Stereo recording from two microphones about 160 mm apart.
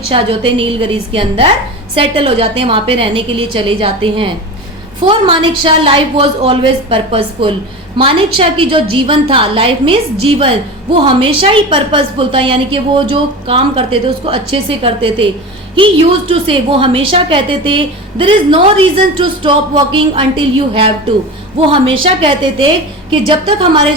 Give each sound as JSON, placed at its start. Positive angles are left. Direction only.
{"t": 0.1, "sound": "a woman's voice", "side_deg": -35}
{"t": 16.3, "sound": "a woman's voice", "side_deg": -35}